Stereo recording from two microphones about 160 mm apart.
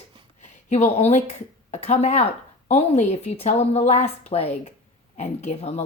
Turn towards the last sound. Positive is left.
turn(degrees=45)  # may be behind; listen again after turning